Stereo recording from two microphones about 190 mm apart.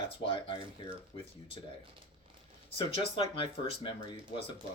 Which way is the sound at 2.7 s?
30° left (ahead or behind).